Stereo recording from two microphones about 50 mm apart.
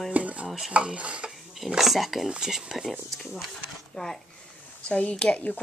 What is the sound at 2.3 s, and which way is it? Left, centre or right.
Speech, centre.